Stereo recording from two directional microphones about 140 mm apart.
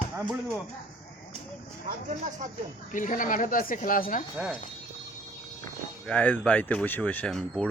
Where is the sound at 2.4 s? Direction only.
65° right (ahead or behind).